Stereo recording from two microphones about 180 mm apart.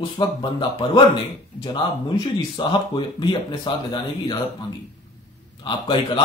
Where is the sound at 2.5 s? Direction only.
25° left (ahead or behind).